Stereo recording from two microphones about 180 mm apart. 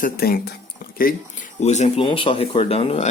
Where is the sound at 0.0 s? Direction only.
55° left (ahead or behind).